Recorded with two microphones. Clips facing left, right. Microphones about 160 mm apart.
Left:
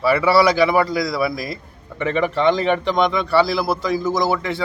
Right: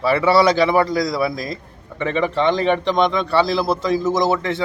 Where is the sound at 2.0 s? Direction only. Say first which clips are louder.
Left 1 dB; 20° right (ahead or behind).